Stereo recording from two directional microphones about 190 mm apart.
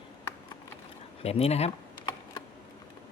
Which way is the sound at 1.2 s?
30° left (ahead or behind).